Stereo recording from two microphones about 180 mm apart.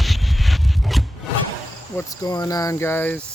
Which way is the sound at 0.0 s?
Centre (ahead or behind).